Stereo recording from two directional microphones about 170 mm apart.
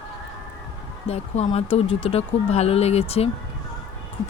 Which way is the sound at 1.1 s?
35° left (ahead or behind).